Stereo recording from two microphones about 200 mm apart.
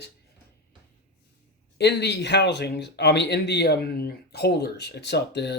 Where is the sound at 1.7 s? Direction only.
55° left (ahead or behind).